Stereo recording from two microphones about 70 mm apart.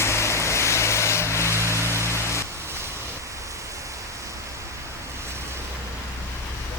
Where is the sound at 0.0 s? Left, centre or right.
Left.